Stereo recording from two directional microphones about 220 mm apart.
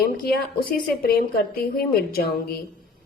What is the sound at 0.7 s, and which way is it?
A woman's voice, 45° left (ahead or behind).